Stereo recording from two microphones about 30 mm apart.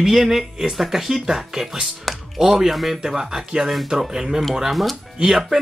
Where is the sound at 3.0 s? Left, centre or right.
Centre.